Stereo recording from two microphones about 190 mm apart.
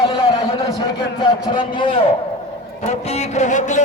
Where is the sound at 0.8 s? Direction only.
25° left (ahead or behind).